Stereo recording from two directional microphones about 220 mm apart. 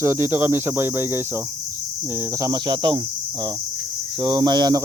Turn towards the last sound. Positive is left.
turn(degrees=-15)  # may be behind; listen again after turning